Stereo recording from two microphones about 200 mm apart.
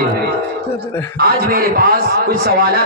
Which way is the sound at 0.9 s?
15° left (ahead or behind).